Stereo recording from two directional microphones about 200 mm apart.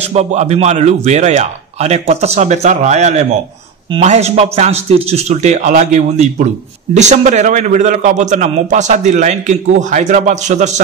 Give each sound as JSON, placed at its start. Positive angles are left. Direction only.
{"t": 0.0, "sound": "a man's voice", "side_deg": -35}